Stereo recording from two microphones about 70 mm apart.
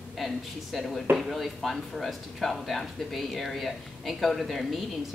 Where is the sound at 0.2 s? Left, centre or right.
Centre.